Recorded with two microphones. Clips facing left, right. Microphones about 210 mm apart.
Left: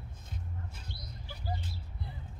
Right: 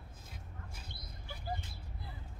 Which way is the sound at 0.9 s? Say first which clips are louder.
Left 3 dB; 50° right (ahead or behind).